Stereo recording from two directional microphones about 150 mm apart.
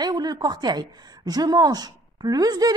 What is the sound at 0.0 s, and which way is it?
A woman's voice, 25° right (ahead or behind).